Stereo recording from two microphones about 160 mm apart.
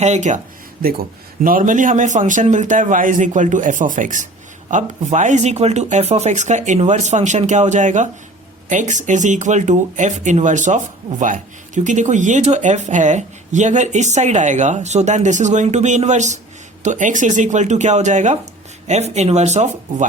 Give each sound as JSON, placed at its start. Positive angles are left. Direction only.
{"t": 0.0, "sound": "speech", "side_deg": -45}
{"t": 1.5, "sound": "speech", "side_deg": -55}